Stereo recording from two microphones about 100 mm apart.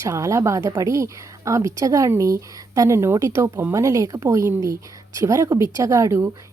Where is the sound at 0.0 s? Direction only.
30° right (ahead or behind).